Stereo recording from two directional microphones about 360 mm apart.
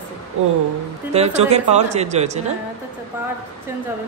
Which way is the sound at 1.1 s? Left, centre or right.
Centre.